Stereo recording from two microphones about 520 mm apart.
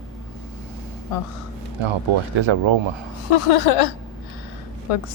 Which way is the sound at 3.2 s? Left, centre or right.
Left.